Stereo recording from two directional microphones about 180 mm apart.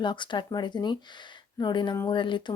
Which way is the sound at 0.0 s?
25° left (ahead or behind).